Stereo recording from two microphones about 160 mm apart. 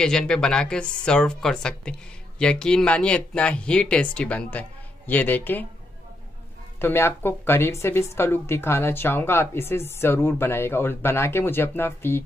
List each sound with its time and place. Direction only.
0.0 s a woman's voice: 5° left (ahead or behind)
6.8 s a woman's voice: 15° left (ahead or behind)